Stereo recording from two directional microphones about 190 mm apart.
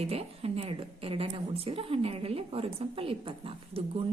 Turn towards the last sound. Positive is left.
turn(degrees=-30)  # may be behind; listen again after turning